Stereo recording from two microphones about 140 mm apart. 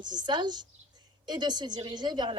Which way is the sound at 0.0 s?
30° right (ahead or behind).